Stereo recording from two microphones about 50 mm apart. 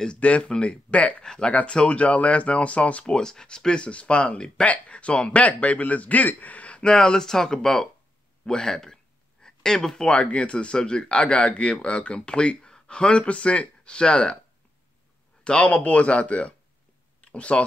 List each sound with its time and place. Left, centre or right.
0.0 s speech: left
1.2 s speech: centre
1.5 s speech: left
3.1 s speech: centre
15.4 s speech: left